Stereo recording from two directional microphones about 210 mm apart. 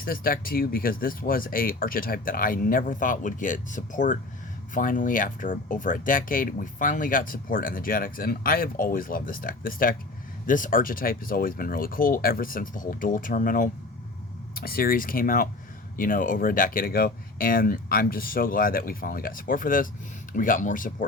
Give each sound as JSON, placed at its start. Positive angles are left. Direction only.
{"t": 0.0, "sound": "speech", "side_deg": 45}